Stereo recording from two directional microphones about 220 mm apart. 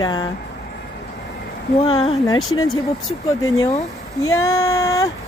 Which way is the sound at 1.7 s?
25° left (ahead or behind).